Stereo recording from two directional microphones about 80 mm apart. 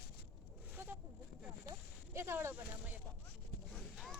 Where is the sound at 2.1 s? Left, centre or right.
Right.